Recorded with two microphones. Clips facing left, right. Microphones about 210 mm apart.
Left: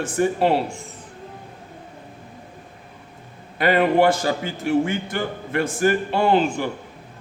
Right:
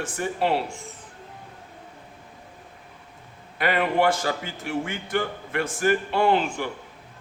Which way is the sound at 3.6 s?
35° left (ahead or behind).